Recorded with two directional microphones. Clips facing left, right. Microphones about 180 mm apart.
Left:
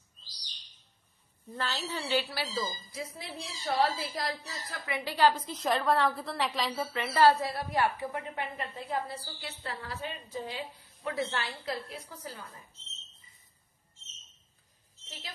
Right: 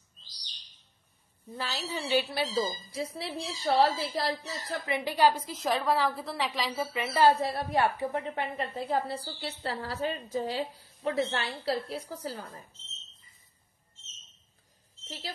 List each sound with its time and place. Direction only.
1.5 s a woman's voice: 10° right (ahead or behind)
6.9 s a woman's voice: 15° right (ahead or behind)
7.3 s a woman's voice: 25° right (ahead or behind)
15.0 s speech: 35° right (ahead or behind)